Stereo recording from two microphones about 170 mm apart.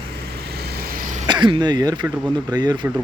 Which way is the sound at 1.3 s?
25° right (ahead or behind).